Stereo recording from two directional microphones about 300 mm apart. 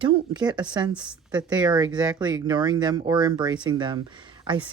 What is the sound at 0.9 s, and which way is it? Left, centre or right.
A woman's voice, centre.